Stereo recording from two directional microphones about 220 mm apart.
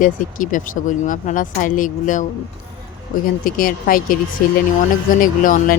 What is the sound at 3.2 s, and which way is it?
Speech, 40° left (ahead or behind).